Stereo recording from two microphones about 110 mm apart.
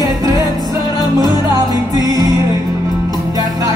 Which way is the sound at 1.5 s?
30° right (ahead or behind).